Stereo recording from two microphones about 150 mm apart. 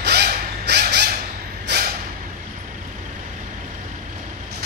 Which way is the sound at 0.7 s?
90° right.